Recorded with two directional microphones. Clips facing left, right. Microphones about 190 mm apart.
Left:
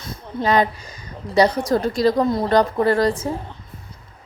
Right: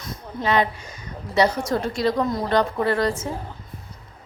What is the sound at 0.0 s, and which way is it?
A woman's voice, 40° left (ahead or behind).